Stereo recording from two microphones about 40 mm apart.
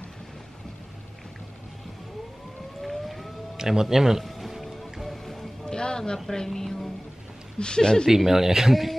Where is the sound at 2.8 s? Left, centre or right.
Centre.